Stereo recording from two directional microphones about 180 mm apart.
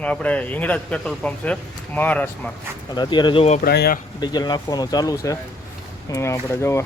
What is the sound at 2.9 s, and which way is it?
Speech, 25° left (ahead or behind).